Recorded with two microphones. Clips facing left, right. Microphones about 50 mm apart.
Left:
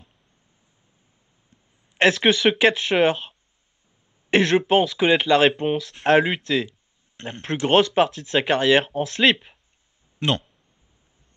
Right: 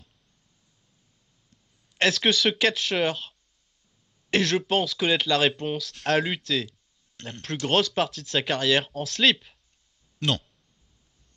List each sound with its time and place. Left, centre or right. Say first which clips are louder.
1.5 s speech: left 4 dB; left